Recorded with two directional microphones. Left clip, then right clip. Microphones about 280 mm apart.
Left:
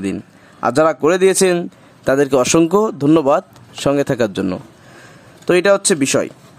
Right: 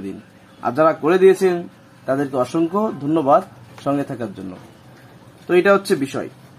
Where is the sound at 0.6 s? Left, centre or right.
Left.